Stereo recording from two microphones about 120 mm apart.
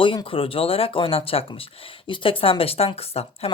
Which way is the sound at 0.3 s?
50° left (ahead or behind).